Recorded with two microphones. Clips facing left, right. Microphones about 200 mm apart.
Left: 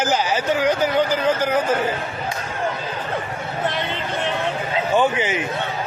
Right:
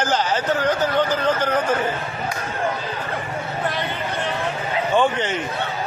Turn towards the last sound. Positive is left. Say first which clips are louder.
# left 1 dB
turn(degrees=5)  # may be behind; listen again after turning